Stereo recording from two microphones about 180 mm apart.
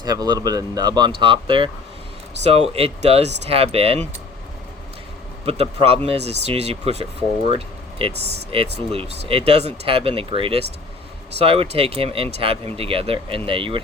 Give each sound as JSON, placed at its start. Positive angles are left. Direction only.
{"t": 0.0, "sound": "speech", "side_deg": -20}
{"t": 5.5, "sound": "speech", "side_deg": -35}
{"t": 8.1, "sound": "speech", "side_deg": -70}
{"t": 8.5, "sound": "speech", "side_deg": -35}